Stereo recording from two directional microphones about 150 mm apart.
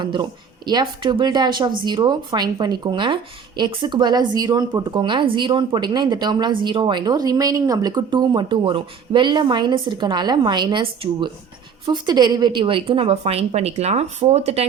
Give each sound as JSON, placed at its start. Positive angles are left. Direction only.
{"t": 0.0, "sound": "a woman's voice", "side_deg": -30}